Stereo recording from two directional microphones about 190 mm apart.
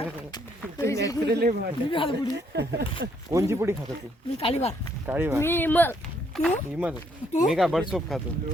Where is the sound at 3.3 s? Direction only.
15° right (ahead or behind).